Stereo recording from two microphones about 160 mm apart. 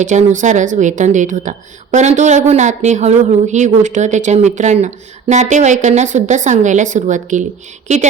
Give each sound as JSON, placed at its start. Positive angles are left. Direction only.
{"t": 0.0, "sound": "a woman's voice", "side_deg": -50}